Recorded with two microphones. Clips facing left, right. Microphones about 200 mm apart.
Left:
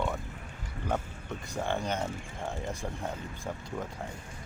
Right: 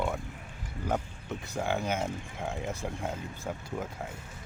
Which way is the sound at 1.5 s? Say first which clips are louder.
Right 1 dB; 5° right (ahead or behind).